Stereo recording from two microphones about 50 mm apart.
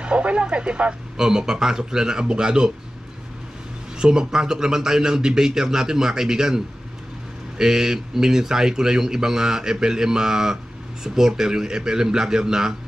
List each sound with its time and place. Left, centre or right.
0.0 s radio: right
1.1 s speech: centre
4.0 s speech: centre